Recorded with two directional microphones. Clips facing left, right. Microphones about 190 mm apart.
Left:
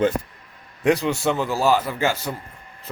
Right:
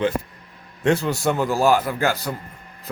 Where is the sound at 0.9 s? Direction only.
Centre (ahead or behind).